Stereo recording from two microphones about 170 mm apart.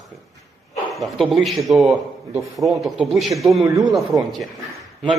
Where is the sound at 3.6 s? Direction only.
20° right (ahead or behind).